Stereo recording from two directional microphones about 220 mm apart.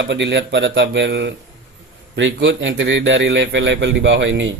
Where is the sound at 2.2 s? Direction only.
55° right (ahead or behind).